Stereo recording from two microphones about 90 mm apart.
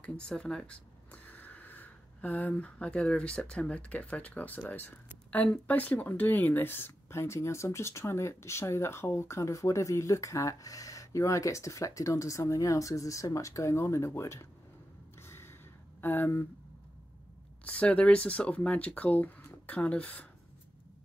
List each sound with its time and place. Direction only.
0.0 s speech: 10° left (ahead or behind); by 14.5 s 30° left (ahead or behind)
15.2 s gasp: 25° left (ahead or behind)
16.0 s speech: 25° left (ahead or behind)
17.6 s speech: 15° left (ahead or behind)